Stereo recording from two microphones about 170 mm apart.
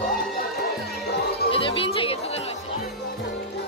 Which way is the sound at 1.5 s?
30° left (ahead or behind).